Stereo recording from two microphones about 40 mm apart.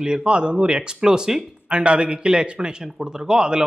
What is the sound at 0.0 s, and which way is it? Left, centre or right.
Speech, right.